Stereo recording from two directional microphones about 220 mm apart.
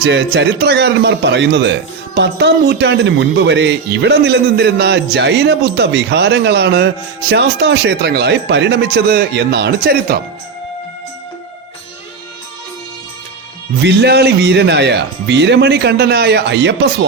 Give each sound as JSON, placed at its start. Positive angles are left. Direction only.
{"t": 0.0, "sound": "speech", "side_deg": -50}
{"t": 13.8, "sound": "speech", "side_deg": -50}